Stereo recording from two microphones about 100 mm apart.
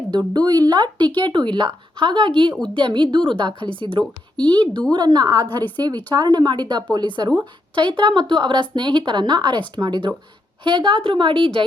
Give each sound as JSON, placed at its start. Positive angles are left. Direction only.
{"t": 0.1, "sound": "a woman's voice", "side_deg": -45}
{"t": 4.4, "sound": "speech", "side_deg": 10}
{"t": 4.9, "sound": "a woman's voice", "side_deg": -45}